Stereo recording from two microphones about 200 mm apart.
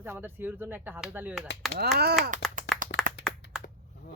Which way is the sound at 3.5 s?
5° right (ahead or behind).